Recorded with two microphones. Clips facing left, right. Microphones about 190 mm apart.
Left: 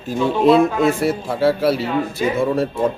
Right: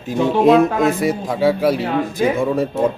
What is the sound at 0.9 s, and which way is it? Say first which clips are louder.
Speech: even; 15° right (ahead or behind).